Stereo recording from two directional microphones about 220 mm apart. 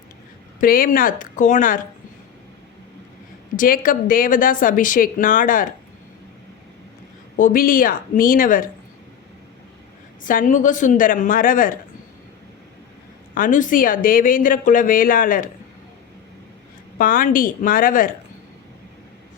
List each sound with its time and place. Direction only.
0.6 s speech: 40° left (ahead or behind)
3.5 s speech: 40° left (ahead or behind)
7.3 s speech: 40° left (ahead or behind)
10.2 s speech: 35° left (ahead or behind)
13.3 s speech: 35° left (ahead or behind)
17.0 s speech: 40° left (ahead or behind)